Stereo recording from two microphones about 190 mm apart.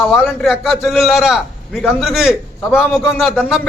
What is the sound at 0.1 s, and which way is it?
A man's voice, centre (ahead or behind).